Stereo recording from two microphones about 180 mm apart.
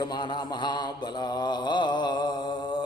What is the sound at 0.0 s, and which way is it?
Mantra, 25° left (ahead or behind).